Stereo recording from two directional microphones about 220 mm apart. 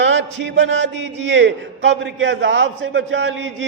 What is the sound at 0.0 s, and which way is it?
A man's voice, 55° right (ahead or behind).